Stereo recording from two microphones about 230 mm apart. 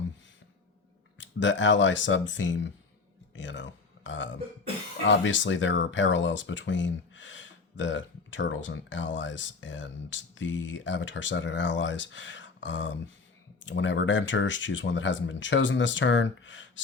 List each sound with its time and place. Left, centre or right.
1.2 s speech: left